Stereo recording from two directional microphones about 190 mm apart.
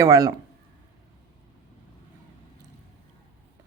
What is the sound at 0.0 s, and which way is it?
Speech, 20° right (ahead or behind).